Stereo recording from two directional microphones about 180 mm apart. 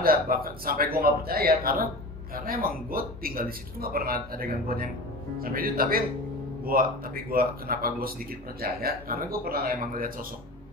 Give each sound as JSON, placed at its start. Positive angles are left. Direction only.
{"t": 0.0, "sound": "a man's voice", "side_deg": -55}